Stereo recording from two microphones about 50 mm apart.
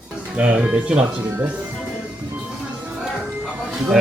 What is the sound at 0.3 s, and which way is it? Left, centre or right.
Speech, right.